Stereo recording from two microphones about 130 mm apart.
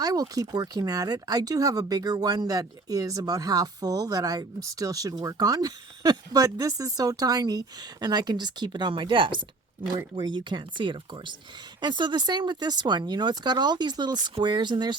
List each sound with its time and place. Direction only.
0.0 s speech: 30° right (ahead or behind)